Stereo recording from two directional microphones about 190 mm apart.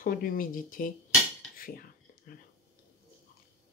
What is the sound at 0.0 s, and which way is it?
Speech, 50° left (ahead or behind).